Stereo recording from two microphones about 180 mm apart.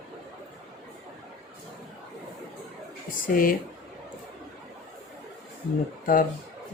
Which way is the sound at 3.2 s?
50° left (ahead or behind).